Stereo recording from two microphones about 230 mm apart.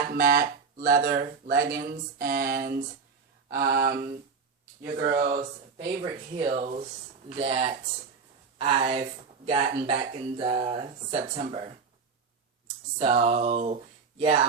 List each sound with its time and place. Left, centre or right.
0.1 s speech: right
5.7 s speech: right
13.0 s speech: right